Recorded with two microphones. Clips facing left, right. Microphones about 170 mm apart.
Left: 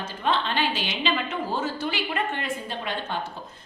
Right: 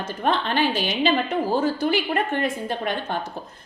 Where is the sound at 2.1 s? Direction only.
50° right (ahead or behind).